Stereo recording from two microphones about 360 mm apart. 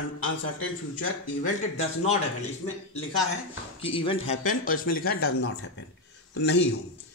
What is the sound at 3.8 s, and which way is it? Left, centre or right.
Speech, centre.